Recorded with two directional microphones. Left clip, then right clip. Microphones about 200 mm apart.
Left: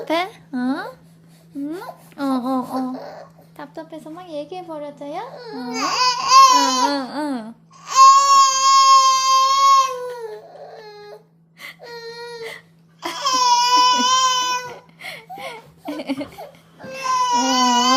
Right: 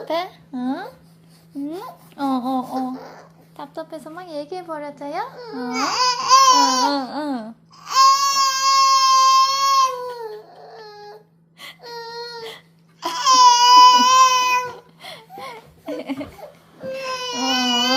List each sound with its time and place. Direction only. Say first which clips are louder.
0.0 s a child's voice: left 3 dB; 25° left (ahead or behind)
2.9 s a child's voice: left 3 dB; 10° left (ahead or behind)
5.4 s babbling: left 2 dB; 10° left (ahead or behind)
10.8 s baby cry: even; 10° left (ahead or behind)
12.4 s crying: left 2 dB; 5° left (ahead or behind)
15.0 s a sound: left 3 dB; 15° left (ahead or behind)
16.9 s baby cry: left 8 dB; 15° left (ahead or behind)